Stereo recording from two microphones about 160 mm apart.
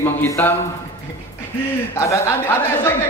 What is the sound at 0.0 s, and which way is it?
Speech, 15° left (ahead or behind).